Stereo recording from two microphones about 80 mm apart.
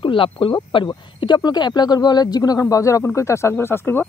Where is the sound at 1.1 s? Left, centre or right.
Left.